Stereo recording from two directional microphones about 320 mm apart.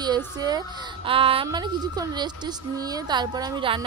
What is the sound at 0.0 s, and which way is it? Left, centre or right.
Speech, centre.